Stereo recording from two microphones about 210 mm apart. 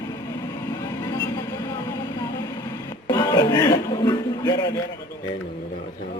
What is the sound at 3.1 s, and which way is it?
Music, 15° left (ahead or behind).